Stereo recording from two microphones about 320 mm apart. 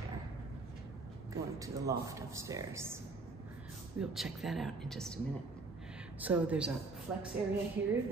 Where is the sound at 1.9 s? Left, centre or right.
Centre.